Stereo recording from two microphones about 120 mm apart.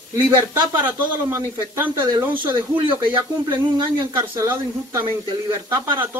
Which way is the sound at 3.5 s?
40° right (ahead or behind).